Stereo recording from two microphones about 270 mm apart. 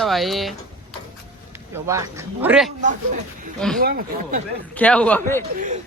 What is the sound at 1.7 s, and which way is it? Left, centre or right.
Speech, centre.